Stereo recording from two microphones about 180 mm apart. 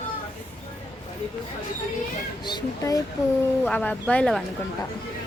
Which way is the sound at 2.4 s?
20° left (ahead or behind).